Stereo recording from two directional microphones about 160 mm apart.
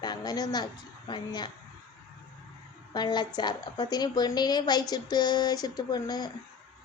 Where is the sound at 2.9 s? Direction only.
25° left (ahead or behind).